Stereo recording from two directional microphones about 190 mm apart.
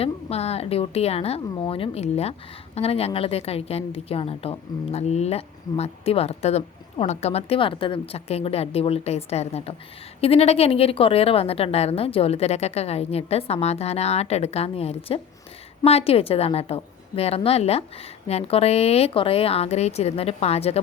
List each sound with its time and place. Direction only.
0.0 s a woman's voice: 35° left (ahead or behind)